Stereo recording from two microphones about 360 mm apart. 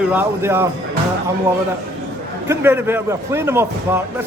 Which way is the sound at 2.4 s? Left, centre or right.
Centre.